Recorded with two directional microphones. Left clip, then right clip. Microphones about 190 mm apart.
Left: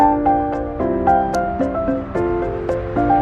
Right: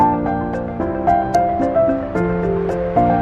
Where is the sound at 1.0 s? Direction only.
Centre (ahead or behind).